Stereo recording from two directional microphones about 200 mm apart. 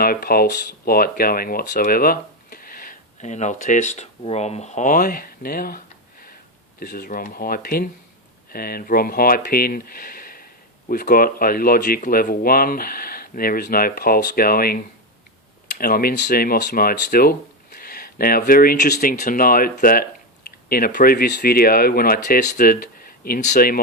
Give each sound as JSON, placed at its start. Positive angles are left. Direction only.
{"t": 0.0, "sound": "speech", "side_deg": 50}
{"t": 15.8, "sound": "speech", "side_deg": 50}